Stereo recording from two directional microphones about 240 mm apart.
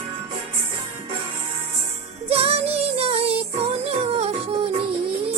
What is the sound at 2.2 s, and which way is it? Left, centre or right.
Music, right.